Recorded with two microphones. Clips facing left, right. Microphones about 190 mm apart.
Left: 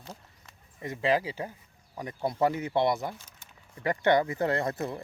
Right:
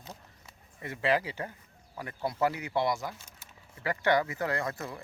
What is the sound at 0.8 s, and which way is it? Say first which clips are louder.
Speech: left 2 dB; 15° left (ahead or behind).